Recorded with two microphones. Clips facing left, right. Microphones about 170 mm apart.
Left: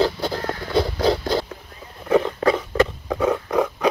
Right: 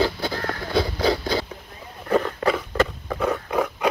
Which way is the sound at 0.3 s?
15° left (ahead or behind).